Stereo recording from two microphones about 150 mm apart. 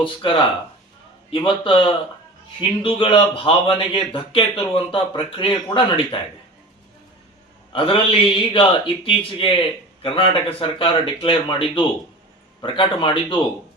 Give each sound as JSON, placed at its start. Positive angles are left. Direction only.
{"t": 0.0, "sound": "speech", "side_deg": 35}
{"t": 7.7, "sound": "speech", "side_deg": 35}